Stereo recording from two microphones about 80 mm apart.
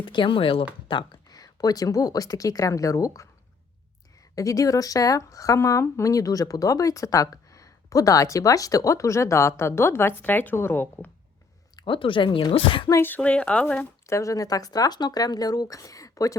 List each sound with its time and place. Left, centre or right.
0.0 s speech: left
0.9 s speech: left
4.4 s speech: left
11.8 s speech: left
13.0 s speech: left
14.1 s speech: left